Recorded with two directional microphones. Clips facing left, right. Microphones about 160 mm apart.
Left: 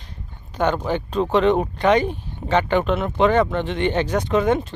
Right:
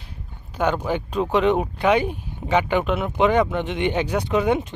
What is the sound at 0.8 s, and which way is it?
Speech, 10° right (ahead or behind).